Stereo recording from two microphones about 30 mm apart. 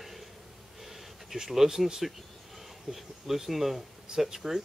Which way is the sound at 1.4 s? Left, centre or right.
Centre.